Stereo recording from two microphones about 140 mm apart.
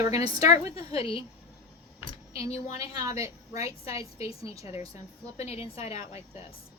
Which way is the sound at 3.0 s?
25° right (ahead or behind).